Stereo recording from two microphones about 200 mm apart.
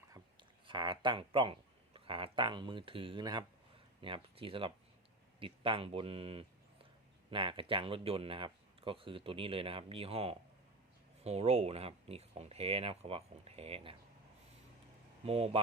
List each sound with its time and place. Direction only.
0.7 s speech: 25° right (ahead or behind)
15.2 s speech: 30° right (ahead or behind)